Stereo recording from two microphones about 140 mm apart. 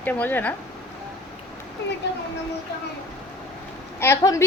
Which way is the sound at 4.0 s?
20° left (ahead or behind).